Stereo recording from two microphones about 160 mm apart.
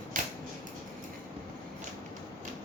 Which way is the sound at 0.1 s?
60° right (ahead or behind).